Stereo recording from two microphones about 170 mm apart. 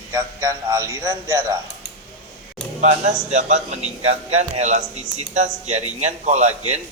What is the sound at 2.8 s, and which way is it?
A man's voice, 40° right (ahead or behind).